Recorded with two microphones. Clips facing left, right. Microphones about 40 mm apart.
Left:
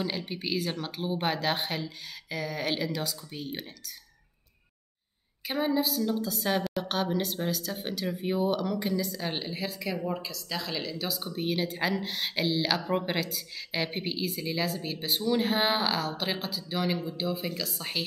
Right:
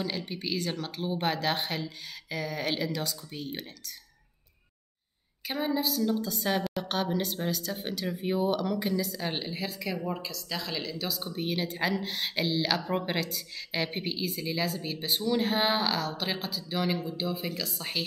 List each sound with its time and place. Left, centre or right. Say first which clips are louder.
0.0 s a woman's voice: left 1 dB; centre
5.5 s a woman's voice: left 2 dB; centre